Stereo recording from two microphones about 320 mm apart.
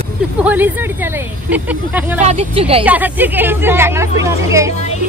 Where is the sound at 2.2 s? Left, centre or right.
Centre.